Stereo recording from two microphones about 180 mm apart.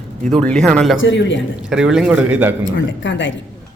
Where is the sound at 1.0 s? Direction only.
90° left.